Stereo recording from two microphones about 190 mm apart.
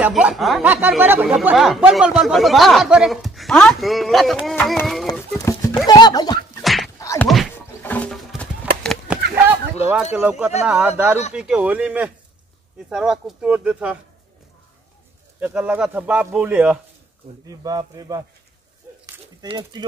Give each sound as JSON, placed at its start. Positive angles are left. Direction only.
{"t": 0.0, "sound": "speech", "side_deg": -5}
{"t": 5.4, "sound": "speech", "side_deg": 15}
{"t": 6.6, "sound": "a sound", "side_deg": 0}
{"t": 7.0, "sound": "thunk", "side_deg": 15}
{"t": 7.5, "sound": "a sound", "side_deg": 10}
{"t": 10.1, "sound": "speech", "side_deg": -10}
{"t": 15.4, "sound": "speech", "side_deg": -10}
{"t": 17.5, "sound": "speech", "side_deg": -20}
{"t": 19.4, "sound": "speech", "side_deg": -20}